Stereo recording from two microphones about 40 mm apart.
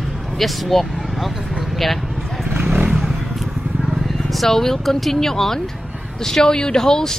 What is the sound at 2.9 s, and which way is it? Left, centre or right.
Vehicle, centre.